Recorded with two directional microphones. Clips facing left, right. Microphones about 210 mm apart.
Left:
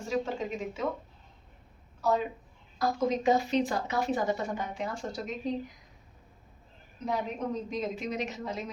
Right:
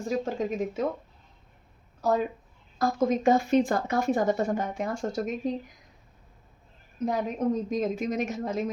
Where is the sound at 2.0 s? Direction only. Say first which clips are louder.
Right 3 dB; 45° right (ahead or behind).